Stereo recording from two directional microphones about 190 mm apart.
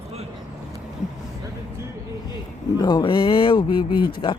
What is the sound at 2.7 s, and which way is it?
Speech, 20° left (ahead or behind).